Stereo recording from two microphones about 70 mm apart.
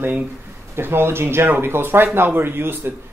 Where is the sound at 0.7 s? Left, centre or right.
Right.